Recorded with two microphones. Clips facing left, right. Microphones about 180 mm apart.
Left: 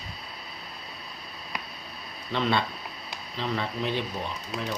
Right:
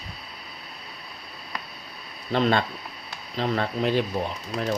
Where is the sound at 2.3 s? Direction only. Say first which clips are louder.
Right 4 dB; 45° right (ahead or behind).